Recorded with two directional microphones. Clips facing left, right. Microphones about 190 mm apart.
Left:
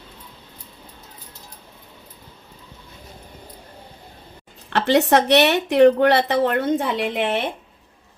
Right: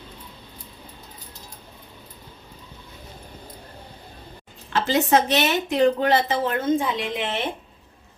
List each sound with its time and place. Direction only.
4.7 s speech: 65° left (ahead or behind)